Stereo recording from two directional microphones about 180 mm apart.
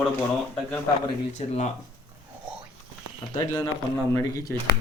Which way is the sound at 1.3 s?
40° left (ahead or behind).